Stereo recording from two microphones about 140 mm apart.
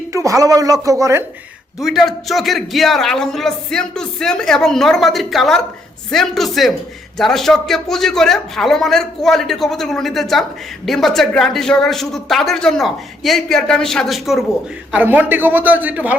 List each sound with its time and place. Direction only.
0.1 s speech: 25° right (ahead or behind)
1.8 s a man's voice: centre (ahead or behind)
14.9 s a man's voice: 10° right (ahead or behind)